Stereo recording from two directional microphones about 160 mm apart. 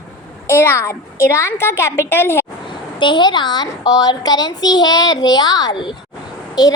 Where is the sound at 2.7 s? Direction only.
30° left (ahead or behind).